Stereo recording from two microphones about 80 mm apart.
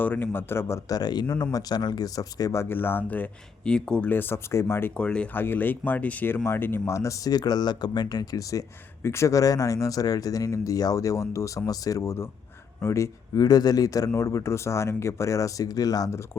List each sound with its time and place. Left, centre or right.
0.0 s a man's voice: left
0.9 s speech: left
2.6 s a man's voice: left
3.6 s speech: centre
4.1 s a man's voice: left
4.9 s speech: centre
5.3 s speech: left